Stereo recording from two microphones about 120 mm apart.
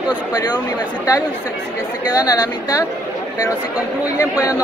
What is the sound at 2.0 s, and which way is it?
Speech, 30° left (ahead or behind).